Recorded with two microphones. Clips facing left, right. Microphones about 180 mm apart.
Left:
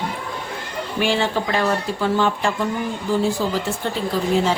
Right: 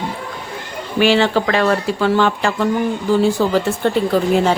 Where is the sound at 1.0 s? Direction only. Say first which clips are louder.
Right 7 dB; 80° right.